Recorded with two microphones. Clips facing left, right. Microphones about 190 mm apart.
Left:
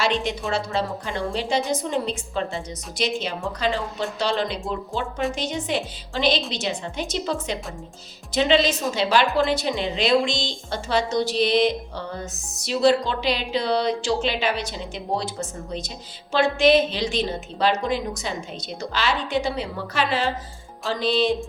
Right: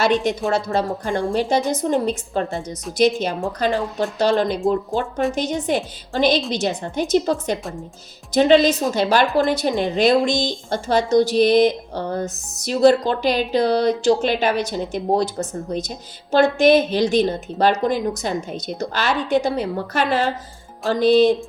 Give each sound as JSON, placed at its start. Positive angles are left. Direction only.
{"t": 0.0, "sound": "a woman's voice", "side_deg": -40}